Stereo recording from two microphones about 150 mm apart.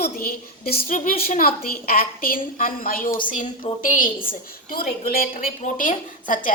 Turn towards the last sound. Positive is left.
turn(degrees=65)  # may be behind; listen again after turning